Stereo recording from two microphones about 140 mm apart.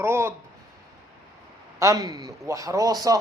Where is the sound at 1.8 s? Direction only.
25° right (ahead or behind).